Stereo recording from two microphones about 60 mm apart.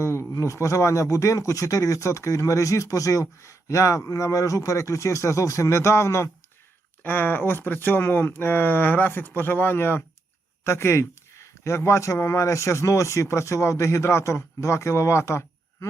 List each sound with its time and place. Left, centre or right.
0.0 s speech: left
7.0 s speech: left
10.6 s speech: left